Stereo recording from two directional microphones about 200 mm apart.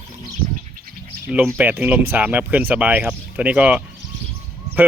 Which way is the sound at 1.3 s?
10° right (ahead or behind).